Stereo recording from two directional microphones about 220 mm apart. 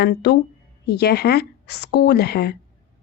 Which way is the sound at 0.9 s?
45° left (ahead or behind).